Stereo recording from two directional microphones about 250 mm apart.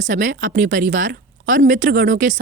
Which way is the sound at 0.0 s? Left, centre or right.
Right.